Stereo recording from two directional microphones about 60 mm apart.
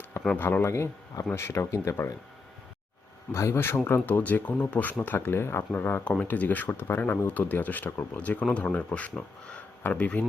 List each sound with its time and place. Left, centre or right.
0.3 s speech: left
0.6 s speech: left
3.3 s speech: left
4.0 s speech: left
5.7 s speech: left
6.7 s speech: left